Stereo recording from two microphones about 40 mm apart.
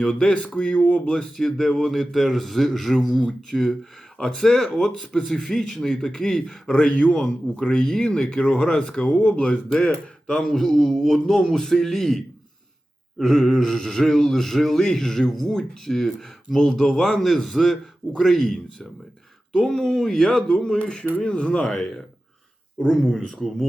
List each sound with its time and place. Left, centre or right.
0.0 s speech: centre
1.0 s a man's voice: centre
6.9 s speech: left
7.2 s speech: centre
10.4 s a man's voice: centre
20.7 s speech: left
22.9 s a man's voice: centre